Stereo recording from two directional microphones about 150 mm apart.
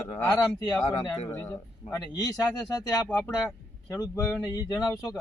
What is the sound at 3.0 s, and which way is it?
Speech, 10° left (ahead or behind).